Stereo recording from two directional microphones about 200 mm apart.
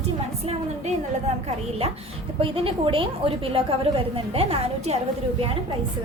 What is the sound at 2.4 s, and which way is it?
A woman's voice, 25° right (ahead or behind).